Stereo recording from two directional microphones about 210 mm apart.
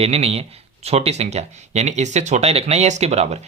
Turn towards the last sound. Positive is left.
turn(degrees=-30)  # may be behind; listen again after turning